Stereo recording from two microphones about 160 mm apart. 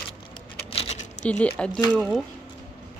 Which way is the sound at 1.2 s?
10° left (ahead or behind).